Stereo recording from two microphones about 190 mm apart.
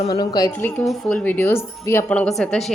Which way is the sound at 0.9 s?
5° left (ahead or behind).